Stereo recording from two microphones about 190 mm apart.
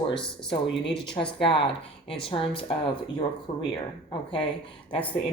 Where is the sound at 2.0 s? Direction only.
30° left (ahead or behind).